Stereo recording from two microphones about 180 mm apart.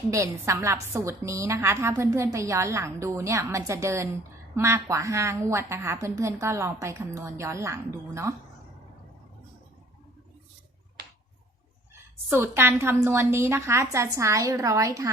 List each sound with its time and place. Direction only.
0.1 s a woman's voice: 15° right (ahead or behind)
12.3 s a woman's voice: 10° right (ahead or behind)